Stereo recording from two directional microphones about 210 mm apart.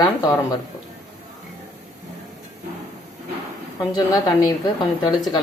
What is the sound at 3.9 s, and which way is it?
Speech, 20° left (ahead or behind).